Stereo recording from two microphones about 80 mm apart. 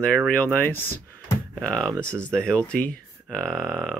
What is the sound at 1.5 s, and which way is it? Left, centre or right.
Speech, centre.